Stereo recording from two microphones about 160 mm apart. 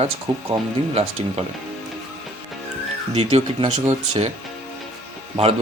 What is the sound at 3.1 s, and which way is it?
Speech, 40° right (ahead or behind).